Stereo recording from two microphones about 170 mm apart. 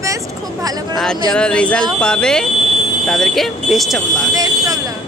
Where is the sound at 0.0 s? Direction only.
20° right (ahead or behind).